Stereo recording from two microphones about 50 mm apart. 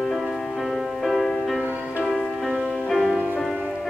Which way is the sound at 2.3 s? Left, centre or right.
Centre.